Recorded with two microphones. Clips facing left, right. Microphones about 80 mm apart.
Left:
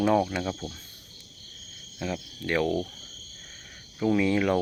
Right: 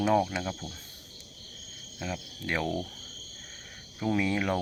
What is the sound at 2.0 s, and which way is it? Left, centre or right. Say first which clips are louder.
Speech: left 4 dB; centre.